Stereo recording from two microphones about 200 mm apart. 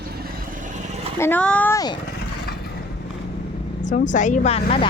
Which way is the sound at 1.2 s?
5° left (ahead or behind).